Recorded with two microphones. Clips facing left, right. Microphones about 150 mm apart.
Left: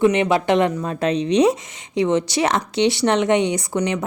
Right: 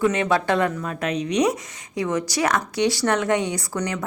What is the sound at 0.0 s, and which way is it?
A woman's voice, 20° left (ahead or behind).